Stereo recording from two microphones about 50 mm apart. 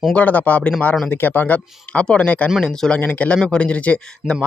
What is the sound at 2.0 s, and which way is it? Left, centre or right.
A man's voice, centre.